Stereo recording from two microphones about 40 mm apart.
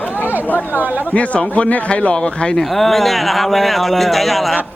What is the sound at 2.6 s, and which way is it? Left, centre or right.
Speech, centre.